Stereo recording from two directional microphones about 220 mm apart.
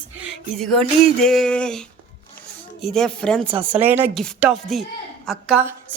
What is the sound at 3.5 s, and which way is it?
Speech, 25° right (ahead or behind).